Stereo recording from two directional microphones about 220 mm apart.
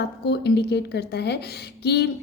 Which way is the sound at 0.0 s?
50° left (ahead or behind).